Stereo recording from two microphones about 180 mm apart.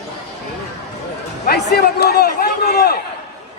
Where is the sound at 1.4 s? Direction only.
60° left (ahead or behind).